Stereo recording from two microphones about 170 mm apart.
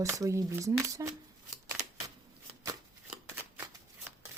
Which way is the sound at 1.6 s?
20° right (ahead or behind).